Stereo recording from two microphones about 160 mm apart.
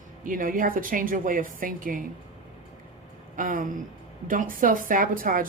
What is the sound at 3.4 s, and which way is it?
Speech, 55° right (ahead or behind).